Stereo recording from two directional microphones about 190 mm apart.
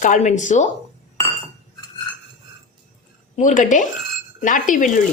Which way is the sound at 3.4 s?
40° left (ahead or behind).